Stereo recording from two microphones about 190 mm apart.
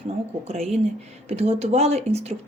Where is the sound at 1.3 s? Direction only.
35° right (ahead or behind).